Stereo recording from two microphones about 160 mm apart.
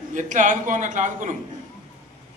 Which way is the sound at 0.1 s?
50° right (ahead or behind).